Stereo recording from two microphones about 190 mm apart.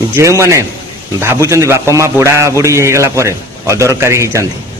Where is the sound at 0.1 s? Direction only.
15° right (ahead or behind).